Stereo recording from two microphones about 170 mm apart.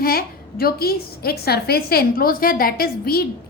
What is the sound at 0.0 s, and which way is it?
A woman's voice, 60° left (ahead or behind).